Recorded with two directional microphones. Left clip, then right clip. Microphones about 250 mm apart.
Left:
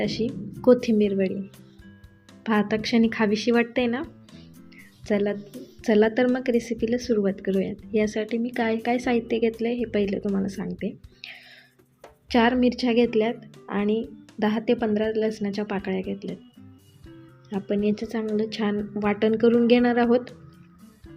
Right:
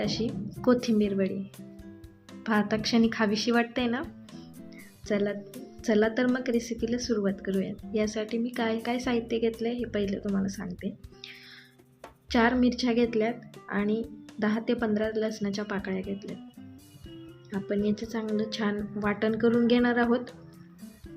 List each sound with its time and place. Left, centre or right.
0.0 s a woman's voice: centre
2.4 s a woman's voice: centre
5.0 s a woman's voice: centre
17.7 s a woman's voice: centre